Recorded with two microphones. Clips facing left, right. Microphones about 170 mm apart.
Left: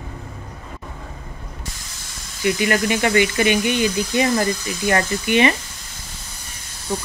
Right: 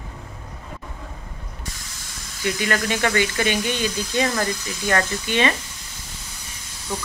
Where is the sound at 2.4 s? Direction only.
15° left (ahead or behind).